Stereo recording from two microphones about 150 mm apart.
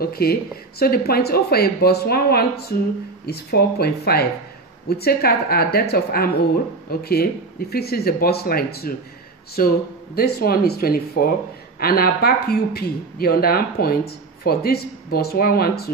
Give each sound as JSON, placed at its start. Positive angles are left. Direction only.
{"t": 0.0, "sound": "speech", "side_deg": 90}
{"t": 9.6, "sound": "a man's voice", "side_deg": 75}
{"t": 10.1, "sound": "speech", "side_deg": 90}